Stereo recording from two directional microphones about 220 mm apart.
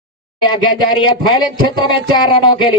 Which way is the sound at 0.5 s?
20° left (ahead or behind).